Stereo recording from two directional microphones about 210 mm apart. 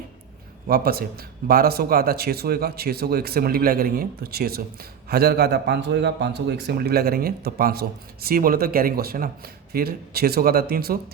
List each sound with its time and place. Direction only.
0.7 s a man's voice: 45° right (ahead or behind)